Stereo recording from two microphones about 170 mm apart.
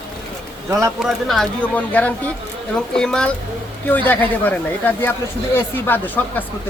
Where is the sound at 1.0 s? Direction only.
Centre (ahead or behind).